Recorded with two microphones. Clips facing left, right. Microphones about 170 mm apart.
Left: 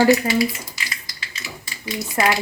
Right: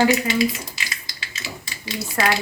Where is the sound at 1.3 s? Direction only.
25° right (ahead or behind).